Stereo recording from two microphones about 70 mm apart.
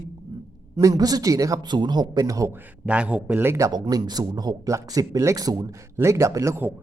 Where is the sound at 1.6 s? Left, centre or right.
Right.